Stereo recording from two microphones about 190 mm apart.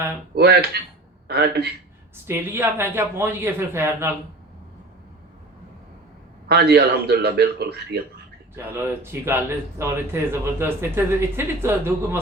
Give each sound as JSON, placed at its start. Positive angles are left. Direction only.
{"t": 0.3, "sound": "a man's voice", "side_deg": -60}
{"t": 2.2, "sound": "speech", "side_deg": -15}
{"t": 6.5, "sound": "a man's voice", "side_deg": -55}
{"t": 8.5, "sound": "speech", "side_deg": -10}